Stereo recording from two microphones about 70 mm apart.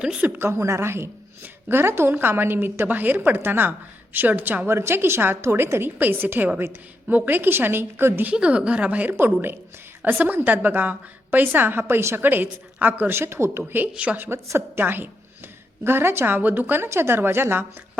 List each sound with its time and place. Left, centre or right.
0.3 s a woman's voice: right
8.3 s speech: centre
9.1 s a woman's voice: right
13.7 s a woman's voice: right
14.3 s a woman's voice: right
14.8 s a woman's voice: right